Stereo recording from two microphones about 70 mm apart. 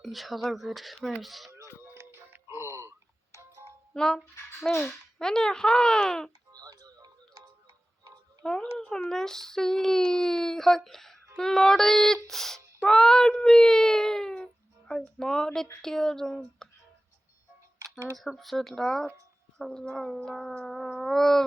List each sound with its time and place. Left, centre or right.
0.0 s speech: centre
1.5 s music: right
3.9 s a child's voice: centre
6.5 s a sound: right
8.4 s a child's voice: centre
16.6 s music: centre
18.2 s speech: centre